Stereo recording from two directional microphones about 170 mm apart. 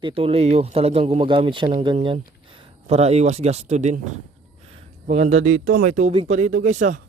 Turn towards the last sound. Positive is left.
turn(degrees=-45)  # may be behind; listen again after turning